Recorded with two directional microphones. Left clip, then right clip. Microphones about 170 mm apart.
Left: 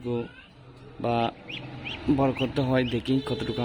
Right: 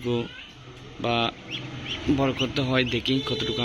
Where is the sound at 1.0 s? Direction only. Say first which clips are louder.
Right 1 dB; 30° left (ahead or behind).